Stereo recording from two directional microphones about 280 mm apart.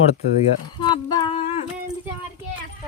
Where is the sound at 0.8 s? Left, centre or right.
Centre.